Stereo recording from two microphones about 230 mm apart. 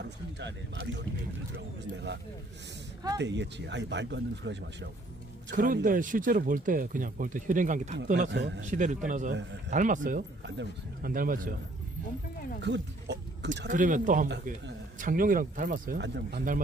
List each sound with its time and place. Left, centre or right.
1.5 s speech: right
3.2 s speech: right
5.5 s speech: right
8.3 s speech: right
8.6 s speech: right
12.6 s a sound: right
13.7 s speech: right